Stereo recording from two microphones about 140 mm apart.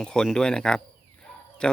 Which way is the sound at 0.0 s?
5° left (ahead or behind).